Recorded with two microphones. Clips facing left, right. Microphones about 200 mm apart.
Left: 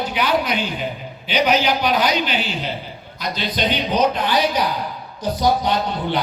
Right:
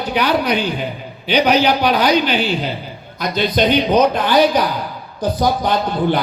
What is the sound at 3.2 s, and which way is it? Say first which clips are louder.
A man's voice: right 7 dB; 50° right (ahead or behind).